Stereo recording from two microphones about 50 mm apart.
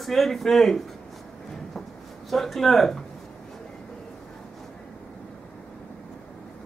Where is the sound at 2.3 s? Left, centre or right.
Centre.